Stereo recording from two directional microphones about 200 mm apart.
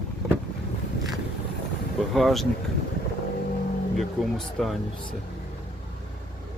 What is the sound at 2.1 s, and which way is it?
Speech, centre (ahead or behind).